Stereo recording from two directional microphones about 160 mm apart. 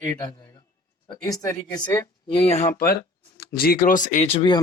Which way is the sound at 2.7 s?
70° left (ahead or behind).